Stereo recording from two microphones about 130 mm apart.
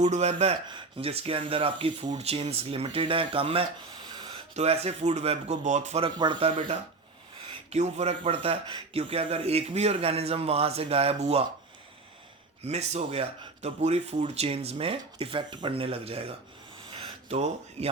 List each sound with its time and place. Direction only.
0.0 s speech: 60° right (ahead or behind)
0.7 s speech: 45° right (ahead or behind); by 6.0 s 65° right (ahead or behind)
6.0 s speech: 35° right (ahead or behind)
7.7 s speech: 60° right (ahead or behind)
12.6 s speech: 55° right (ahead or behind)
16.9 s a sound: 50° right (ahead or behind)